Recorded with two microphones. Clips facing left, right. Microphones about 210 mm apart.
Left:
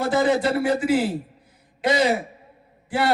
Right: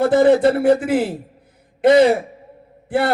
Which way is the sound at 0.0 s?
60° right (ahead or behind).